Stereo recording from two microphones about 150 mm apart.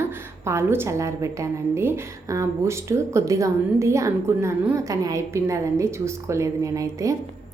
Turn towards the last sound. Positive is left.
turn(degrees=-20)  # may be behind; listen again after turning